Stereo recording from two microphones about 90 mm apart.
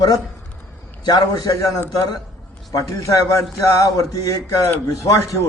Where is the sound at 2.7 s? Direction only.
35° left (ahead or behind).